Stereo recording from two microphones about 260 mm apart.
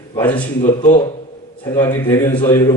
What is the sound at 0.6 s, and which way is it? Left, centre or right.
Speech, left.